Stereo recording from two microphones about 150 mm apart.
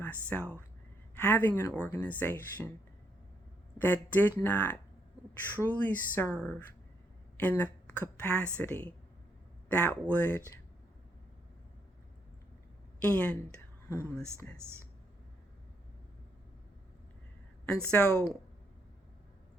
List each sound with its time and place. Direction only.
0.0 s speech: 10° left (ahead or behind)
3.8 s a woman's voice: 10° left (ahead or behind)
13.0 s speech: 10° left (ahead or behind)
17.8 s speech: 10° left (ahead or behind)